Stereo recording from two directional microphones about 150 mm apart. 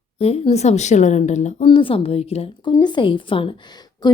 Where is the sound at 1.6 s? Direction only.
35° left (ahead or behind).